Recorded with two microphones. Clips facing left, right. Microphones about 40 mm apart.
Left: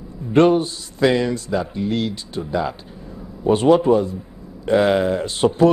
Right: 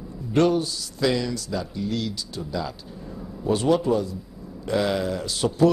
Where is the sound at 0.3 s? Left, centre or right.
Left.